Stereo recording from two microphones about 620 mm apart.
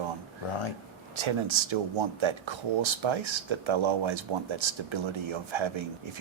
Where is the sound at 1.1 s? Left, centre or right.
Right.